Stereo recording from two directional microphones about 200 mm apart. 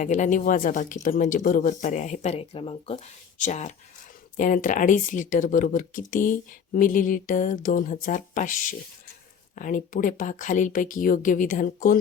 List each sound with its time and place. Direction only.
0.0 s a woman's voice: 35° left (ahead or behind)